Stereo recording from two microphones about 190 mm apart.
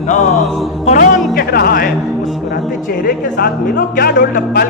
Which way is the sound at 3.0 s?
50° left (ahead or behind).